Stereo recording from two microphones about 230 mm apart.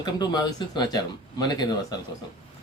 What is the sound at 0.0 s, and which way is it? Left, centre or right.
Speech, centre.